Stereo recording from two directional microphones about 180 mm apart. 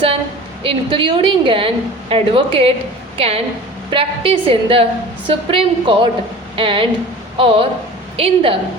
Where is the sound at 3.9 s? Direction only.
30° right (ahead or behind).